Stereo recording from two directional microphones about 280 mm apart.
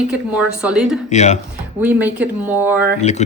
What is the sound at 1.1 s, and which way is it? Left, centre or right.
Speech, left.